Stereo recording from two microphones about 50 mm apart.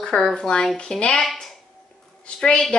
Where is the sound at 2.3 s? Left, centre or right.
Centre.